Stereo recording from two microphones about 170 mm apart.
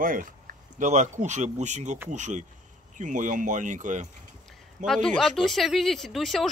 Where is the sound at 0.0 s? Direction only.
55° right (ahead or behind).